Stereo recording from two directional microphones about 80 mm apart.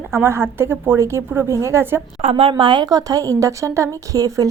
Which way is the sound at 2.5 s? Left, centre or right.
Right.